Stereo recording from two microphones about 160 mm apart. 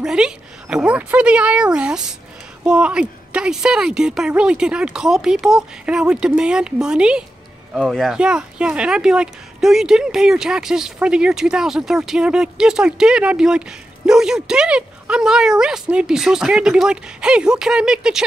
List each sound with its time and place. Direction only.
0.0 s speech: 5° right (ahead or behind)